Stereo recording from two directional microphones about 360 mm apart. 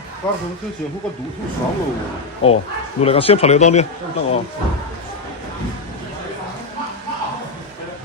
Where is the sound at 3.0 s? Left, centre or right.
Centre.